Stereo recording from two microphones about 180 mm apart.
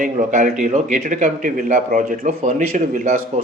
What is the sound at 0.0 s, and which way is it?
A man's voice, 45° right (ahead or behind).